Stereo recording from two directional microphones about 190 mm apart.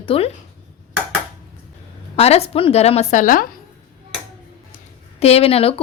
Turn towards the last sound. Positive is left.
turn(degrees=30)  # may be behind; listen again after turning